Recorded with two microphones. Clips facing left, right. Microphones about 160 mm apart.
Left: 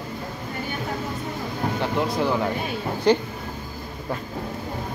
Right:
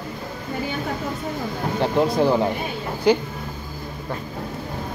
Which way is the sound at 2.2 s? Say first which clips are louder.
Right 5 dB; 30° right (ahead or behind).